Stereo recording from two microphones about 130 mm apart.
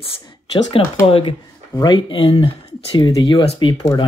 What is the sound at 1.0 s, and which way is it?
Speech, 45° left (ahead or behind).